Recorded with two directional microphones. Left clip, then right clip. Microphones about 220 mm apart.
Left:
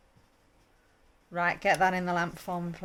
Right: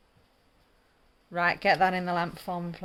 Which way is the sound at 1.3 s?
15° right (ahead or behind).